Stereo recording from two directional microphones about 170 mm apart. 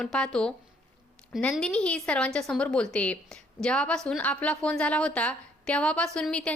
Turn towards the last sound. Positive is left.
turn(degrees=5)  # may be behind; listen again after turning